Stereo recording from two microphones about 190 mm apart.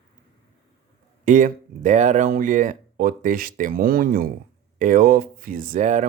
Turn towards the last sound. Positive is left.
turn(degrees=-40)  # may be behind; listen again after turning